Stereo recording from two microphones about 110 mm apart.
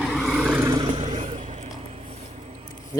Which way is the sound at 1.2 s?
90° right.